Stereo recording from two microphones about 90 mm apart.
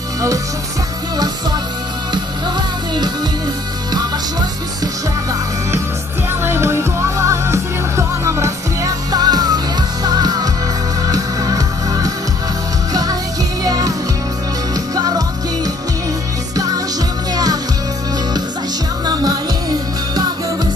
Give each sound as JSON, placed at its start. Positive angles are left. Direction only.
{"t": 3.9, "sound": "music", "side_deg": -50}
{"t": 6.4, "sound": "music", "side_deg": -30}
{"t": 13.7, "sound": "music", "side_deg": -45}
{"t": 15.0, "sound": "music", "side_deg": -45}